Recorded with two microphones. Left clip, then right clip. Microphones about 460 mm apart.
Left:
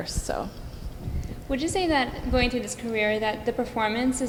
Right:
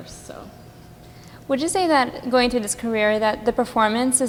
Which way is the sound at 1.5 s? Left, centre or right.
Right.